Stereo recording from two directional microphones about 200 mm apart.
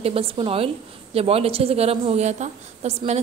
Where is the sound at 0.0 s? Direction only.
25° right (ahead or behind).